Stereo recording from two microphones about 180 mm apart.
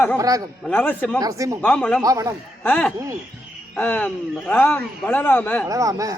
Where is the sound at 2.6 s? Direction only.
10° left (ahead or behind).